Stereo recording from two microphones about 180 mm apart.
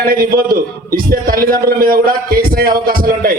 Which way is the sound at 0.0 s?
55° right (ahead or behind).